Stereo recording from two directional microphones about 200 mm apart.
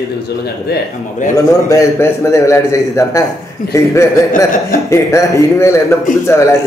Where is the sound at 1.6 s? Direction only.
15° left (ahead or behind).